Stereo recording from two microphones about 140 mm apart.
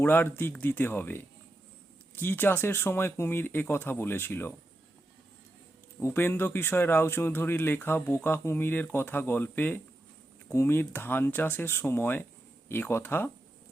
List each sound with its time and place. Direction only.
0.0 s speech: 15° left (ahead or behind)
6.0 s speech: 15° left (ahead or behind)